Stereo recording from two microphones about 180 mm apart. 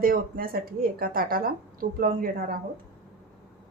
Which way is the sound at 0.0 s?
55° right (ahead or behind).